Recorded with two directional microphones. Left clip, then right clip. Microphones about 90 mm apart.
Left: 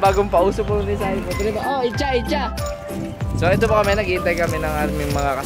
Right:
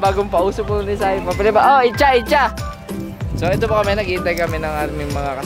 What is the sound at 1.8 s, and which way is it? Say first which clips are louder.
Speech: right 7 dB; 35° right (ahead or behind).